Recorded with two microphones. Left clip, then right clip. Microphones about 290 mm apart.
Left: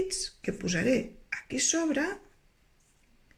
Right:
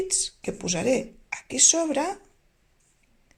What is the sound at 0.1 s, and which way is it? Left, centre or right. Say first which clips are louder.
Speech: right 5 dB; centre.